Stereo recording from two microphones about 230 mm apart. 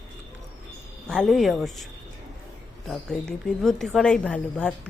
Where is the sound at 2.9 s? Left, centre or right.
Centre.